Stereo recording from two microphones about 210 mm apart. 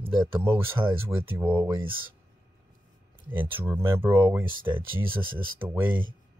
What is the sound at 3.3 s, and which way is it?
Speech, 10° right (ahead or behind).